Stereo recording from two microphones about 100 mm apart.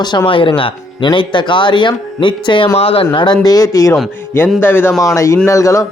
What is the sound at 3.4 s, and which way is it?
Speech, 40° left (ahead or behind).